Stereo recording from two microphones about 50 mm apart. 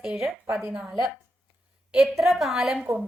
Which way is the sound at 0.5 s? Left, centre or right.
Centre.